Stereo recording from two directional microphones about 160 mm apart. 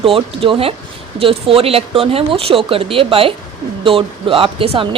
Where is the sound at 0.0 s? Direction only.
35° right (ahead or behind).